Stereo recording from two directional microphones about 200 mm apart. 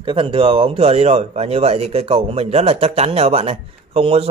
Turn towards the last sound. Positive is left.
turn(degrees=-30)  # may be behind; listen again after turning